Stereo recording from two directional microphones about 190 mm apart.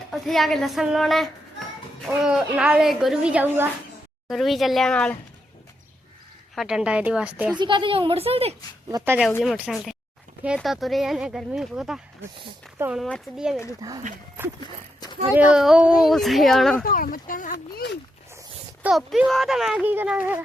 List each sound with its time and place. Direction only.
0.1 s a woman's voice: centre (ahead or behind)
4.3 s a woman's voice: centre (ahead or behind)
6.6 s a woman's voice: 5° right (ahead or behind)
7.5 s speech: 25° right (ahead or behind)
8.9 s speech: 20° right (ahead or behind)
9.4 s a woman's voice: centre (ahead or behind)
13.8 s speech: 20° right (ahead or behind)
15.3 s a woman's voice: 5° right (ahead or behind)
16.8 s speech: 45° left (ahead or behind)
18.8 s a woman's voice: 5° right (ahead or behind)